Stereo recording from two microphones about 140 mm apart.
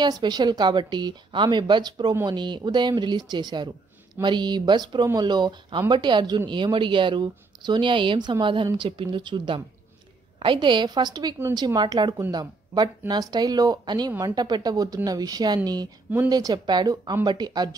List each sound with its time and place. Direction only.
0.0 s speech: 30° right (ahead or behind)